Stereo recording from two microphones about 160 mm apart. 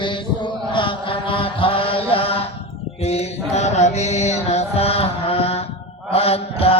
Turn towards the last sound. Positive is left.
turn(degrees=35)  # may be behind; listen again after turning